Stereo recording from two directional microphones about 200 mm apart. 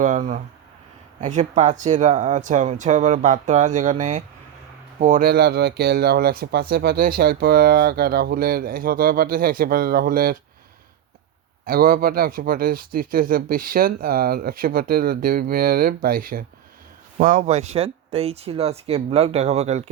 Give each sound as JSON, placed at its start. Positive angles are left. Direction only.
{"t": 0.0, "sound": "speech", "side_deg": -40}
{"t": 11.6, "sound": "speech", "side_deg": -45}